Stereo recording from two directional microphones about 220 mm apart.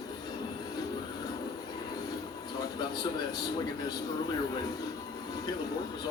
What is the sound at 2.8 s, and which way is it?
Speech, 20° left (ahead or behind).